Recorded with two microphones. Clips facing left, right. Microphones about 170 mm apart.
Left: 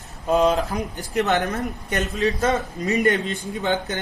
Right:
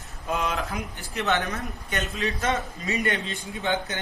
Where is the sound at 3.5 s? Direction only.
40° left (ahead or behind).